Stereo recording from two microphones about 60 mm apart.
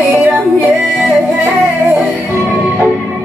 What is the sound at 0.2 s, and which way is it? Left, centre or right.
Music, right.